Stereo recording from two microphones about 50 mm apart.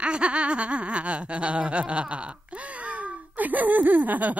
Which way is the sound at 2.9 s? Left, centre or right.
Right.